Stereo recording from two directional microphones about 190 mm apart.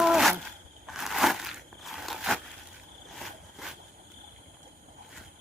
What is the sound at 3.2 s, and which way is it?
Vehicle, centre (ahead or behind).